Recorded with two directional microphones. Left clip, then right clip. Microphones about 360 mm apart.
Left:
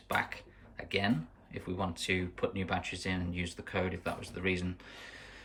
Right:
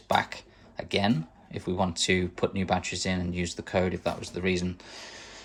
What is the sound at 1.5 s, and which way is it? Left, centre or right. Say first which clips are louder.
Speech: right 9 dB; centre.